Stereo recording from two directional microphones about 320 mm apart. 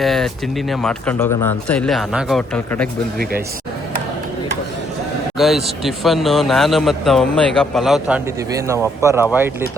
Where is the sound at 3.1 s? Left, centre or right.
Right.